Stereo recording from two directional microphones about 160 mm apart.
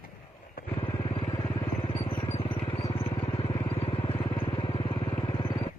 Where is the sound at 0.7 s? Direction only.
35° left (ahead or behind).